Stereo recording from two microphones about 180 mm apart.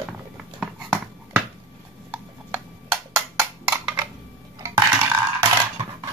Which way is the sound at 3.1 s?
15° right (ahead or behind).